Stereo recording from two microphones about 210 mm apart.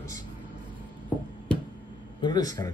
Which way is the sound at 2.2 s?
20° left (ahead or behind).